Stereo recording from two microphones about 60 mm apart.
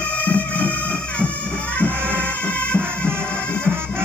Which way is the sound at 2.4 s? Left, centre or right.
Centre.